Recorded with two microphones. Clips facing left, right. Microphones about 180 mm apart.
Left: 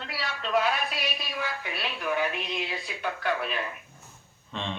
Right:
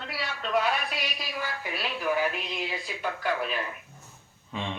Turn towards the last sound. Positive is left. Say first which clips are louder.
# right 1 dB
turn(degrees=-10)  # may be behind; listen again after turning